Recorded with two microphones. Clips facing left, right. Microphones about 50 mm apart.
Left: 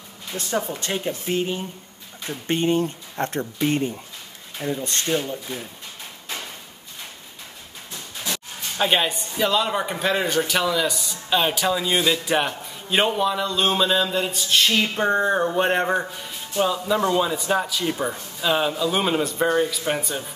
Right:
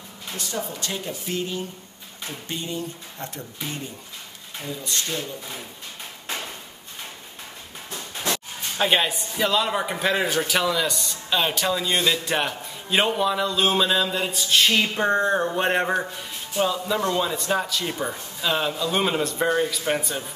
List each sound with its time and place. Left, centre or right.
0.4 s speech: left
2.4 s speech: left
8.3 s a sound: right
8.7 s a man's voice: centre